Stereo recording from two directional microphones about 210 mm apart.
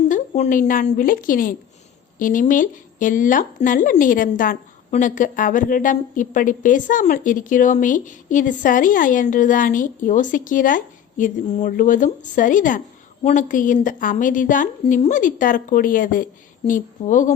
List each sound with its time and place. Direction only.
0.1 s speech: 35° left (ahead or behind)